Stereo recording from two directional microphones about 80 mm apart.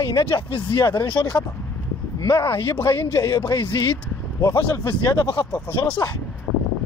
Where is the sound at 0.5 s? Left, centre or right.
Left.